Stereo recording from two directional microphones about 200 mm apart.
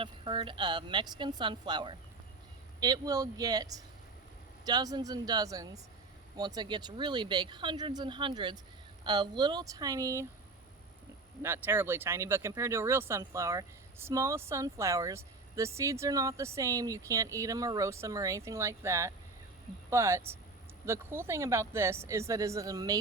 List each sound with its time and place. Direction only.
0.0 s speech: 25° right (ahead or behind)
11.4 s speech: 10° right (ahead or behind)